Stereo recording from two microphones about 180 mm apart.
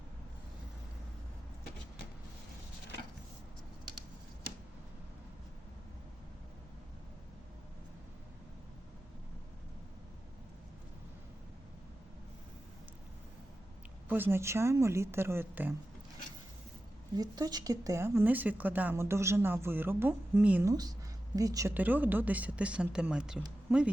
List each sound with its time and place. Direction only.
14.1 s a woman's voice: 10° right (ahead or behind)
17.2 s a woman's voice: 20° right (ahead or behind); by 23.4 s 5° right (ahead or behind)